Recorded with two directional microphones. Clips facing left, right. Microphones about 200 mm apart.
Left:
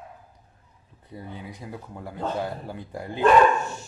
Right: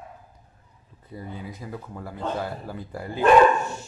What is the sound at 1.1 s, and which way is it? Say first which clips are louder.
Speech: right 2 dB; 15° left (ahead or behind).